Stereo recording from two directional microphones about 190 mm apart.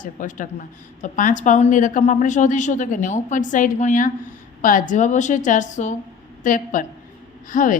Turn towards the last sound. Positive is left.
turn(degrees=45)  # may be behind; listen again after turning